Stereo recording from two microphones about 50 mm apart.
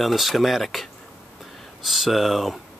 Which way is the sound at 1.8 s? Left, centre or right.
Centre.